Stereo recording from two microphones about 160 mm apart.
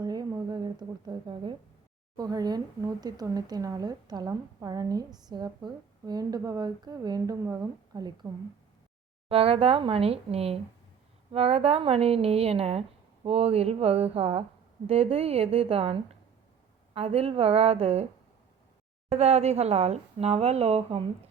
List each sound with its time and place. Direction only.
0.0 s a sound: 25° right (ahead or behind)
2.1 s speech: 25° right (ahead or behind)
9.3 s speech: 35° right (ahead or behind)